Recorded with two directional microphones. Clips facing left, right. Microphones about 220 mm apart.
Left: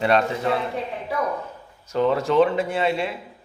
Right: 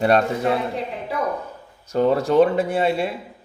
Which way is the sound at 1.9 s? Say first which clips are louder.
Right 2 dB; 40° right (ahead or behind).